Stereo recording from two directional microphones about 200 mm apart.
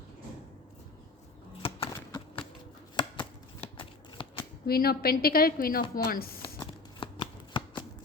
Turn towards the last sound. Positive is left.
turn(degrees=25)  # may be behind; listen again after turning